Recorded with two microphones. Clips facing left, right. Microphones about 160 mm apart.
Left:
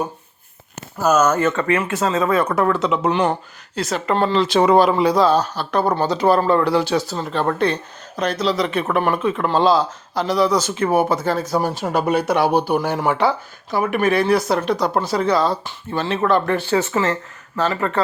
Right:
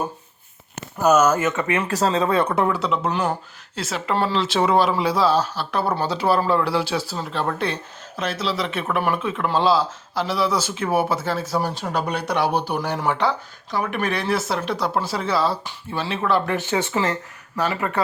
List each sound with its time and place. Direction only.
1.1 s speech: 10° right (ahead or behind)
1.8 s speech: 35° right (ahead or behind)
2.9 s speech: centre (ahead or behind)
16.6 s speech: 15° right (ahead or behind)
17.8 s speech: 10° right (ahead or behind)